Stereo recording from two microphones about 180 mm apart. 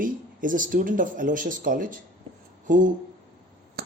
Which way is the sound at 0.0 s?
50° right (ahead or behind).